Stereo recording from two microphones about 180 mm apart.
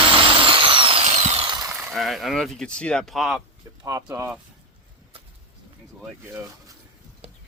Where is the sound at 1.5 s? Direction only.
20° right (ahead or behind).